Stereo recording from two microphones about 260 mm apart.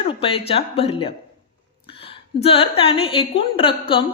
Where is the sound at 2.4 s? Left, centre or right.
Left.